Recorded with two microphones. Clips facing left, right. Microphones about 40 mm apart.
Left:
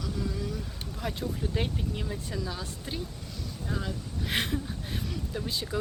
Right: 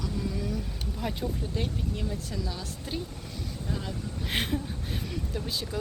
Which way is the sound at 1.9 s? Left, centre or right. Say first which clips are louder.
Right 1 dB; centre.